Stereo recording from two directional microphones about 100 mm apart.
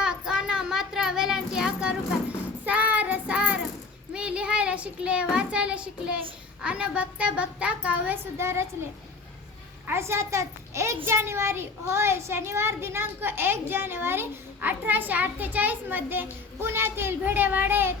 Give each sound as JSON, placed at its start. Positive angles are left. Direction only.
{"t": 0.0, "sound": "child singing", "side_deg": -5}
{"t": 5.3, "sound": "a woman's voice", "side_deg": -10}
{"t": 9.8, "sound": "a child's voice", "side_deg": -25}